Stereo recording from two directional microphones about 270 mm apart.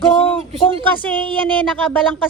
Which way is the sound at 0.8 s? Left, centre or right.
Centre.